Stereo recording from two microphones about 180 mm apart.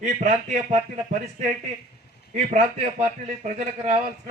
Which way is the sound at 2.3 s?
45° right (ahead or behind).